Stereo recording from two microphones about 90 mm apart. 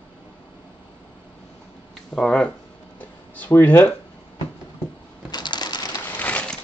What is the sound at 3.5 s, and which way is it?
Speech, 25° left (ahead or behind).